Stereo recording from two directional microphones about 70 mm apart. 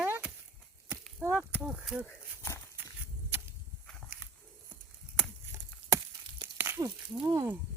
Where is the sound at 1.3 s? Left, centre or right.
Centre.